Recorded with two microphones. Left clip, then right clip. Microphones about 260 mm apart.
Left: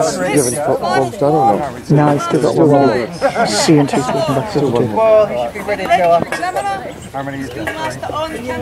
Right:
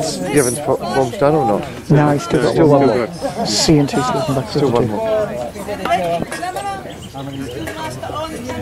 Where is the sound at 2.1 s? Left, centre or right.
Centre.